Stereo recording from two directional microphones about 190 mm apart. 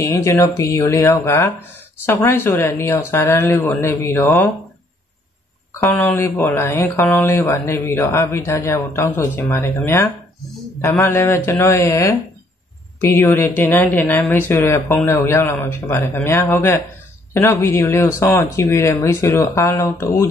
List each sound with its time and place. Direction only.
0.0 s speech: 15° left (ahead or behind)
5.8 s speech: 10° left (ahead or behind)